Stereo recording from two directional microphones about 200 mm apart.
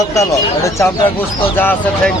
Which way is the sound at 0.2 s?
15° left (ahead or behind).